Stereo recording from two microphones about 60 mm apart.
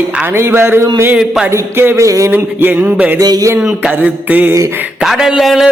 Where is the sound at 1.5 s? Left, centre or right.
Right.